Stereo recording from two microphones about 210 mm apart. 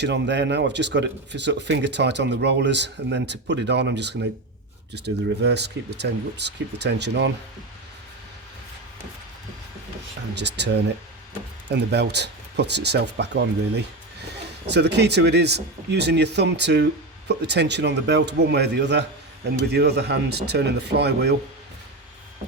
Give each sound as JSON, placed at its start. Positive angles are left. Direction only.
{"t": 0.0, "sound": "speech", "side_deg": -55}
{"t": 10.3, "sound": "speech", "side_deg": -55}
{"t": 11.7, "sound": "speech", "side_deg": -55}